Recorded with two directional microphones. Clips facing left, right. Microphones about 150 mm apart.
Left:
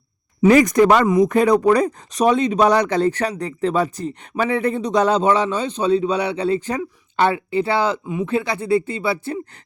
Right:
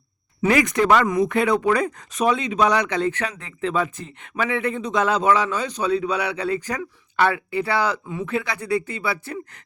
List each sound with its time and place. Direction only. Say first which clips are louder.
0.5 s speech: left 4 dB; 40° left (ahead or behind)
1.0 s speech: left 5 dB; 25° left (ahead or behind)
1.3 s speech: left 5 dB; 40° left (ahead or behind)